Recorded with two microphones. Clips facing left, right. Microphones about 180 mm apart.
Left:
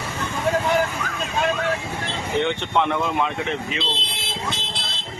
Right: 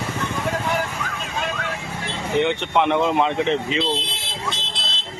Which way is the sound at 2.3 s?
15° right (ahead or behind).